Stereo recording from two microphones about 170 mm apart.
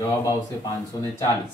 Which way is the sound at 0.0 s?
20° left (ahead or behind).